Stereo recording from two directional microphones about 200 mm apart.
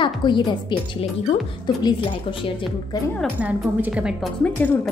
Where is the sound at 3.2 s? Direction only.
5° right (ahead or behind).